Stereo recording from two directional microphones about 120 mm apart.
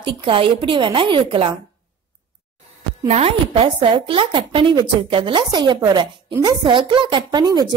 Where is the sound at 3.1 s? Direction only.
55° right (ahead or behind).